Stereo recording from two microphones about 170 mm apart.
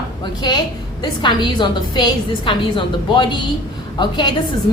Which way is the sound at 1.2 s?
25° left (ahead or behind).